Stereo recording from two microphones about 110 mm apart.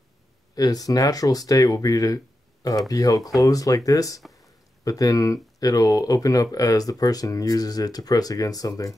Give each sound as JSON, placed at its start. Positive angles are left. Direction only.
{"t": 0.6, "sound": "speech", "side_deg": 35}